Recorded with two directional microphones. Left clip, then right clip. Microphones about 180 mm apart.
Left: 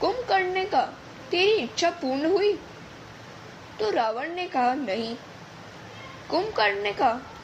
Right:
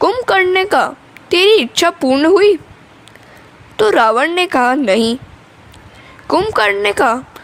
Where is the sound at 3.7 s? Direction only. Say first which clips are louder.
Right 15 dB; 55° right (ahead or behind).